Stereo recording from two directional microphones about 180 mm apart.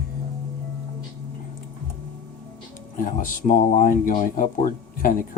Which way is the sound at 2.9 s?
50° left (ahead or behind).